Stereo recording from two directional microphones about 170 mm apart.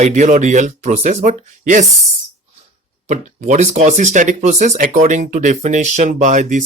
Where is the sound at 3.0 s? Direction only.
40° right (ahead or behind).